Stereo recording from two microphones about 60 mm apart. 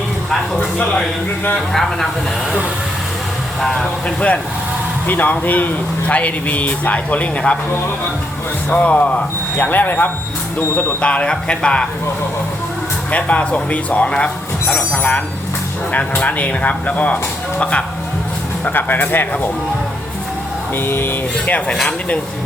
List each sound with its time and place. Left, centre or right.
1.7 s speech: centre
3.6 s speech: centre
5.0 s speech: left
8.7 s speech: left
11.0 s speech: centre
13.1 s speech: left
18.6 s speech: left
20.7 s speech: left